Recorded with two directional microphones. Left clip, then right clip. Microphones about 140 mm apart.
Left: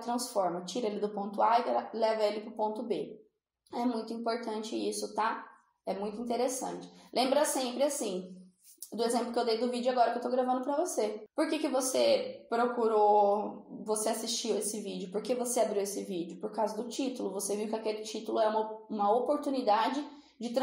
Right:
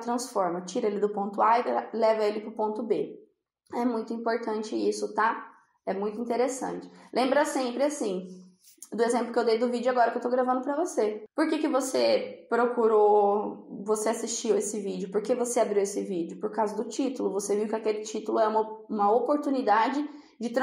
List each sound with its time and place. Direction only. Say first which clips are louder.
0.0 s a woman's voice: right 3 dB; 15° right (ahead or behind)
4.5 s speech: right 6 dB; 10° left (ahead or behind)
5.9 s a woman's voice: right 5 dB; 10° right (ahead or behind)